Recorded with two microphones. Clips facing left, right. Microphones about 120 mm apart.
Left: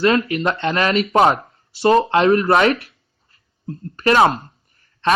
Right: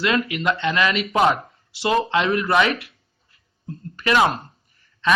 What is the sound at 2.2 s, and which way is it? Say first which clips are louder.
Speech: left 6 dB; 30° left (ahead or behind).